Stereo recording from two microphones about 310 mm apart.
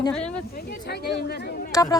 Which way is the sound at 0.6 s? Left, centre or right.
Left.